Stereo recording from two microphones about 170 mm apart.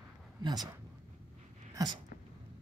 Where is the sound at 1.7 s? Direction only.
25° right (ahead or behind).